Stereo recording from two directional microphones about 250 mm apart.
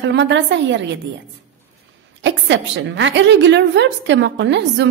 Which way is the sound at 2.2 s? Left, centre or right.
Right.